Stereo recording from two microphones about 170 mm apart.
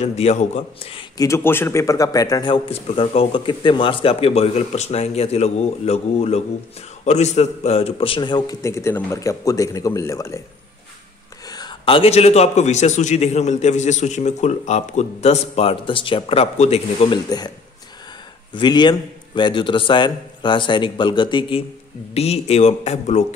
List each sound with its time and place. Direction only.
0.0 s a man's voice: 40° left (ahead or behind)
1.1 s a man's voice: 20° left (ahead or behind)
11.4 s a man's voice: 25° left (ahead or behind)
18.5 s a man's voice: 25° left (ahead or behind)